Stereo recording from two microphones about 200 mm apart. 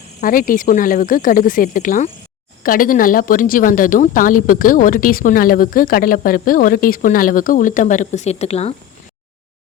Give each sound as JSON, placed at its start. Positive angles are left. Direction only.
{"t": 0.2, "sound": "speech", "side_deg": 45}